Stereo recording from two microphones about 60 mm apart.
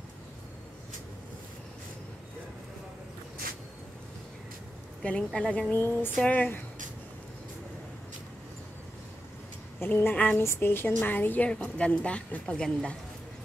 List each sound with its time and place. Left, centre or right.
5.0 s a woman's voice: centre
5.7 s a sound: left
9.8 s speech: left
10.1 s speech: left
10.4 s a sound: left
11.4 s a woman's voice: centre